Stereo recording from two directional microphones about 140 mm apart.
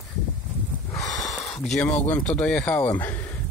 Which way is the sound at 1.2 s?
Centre (ahead or behind).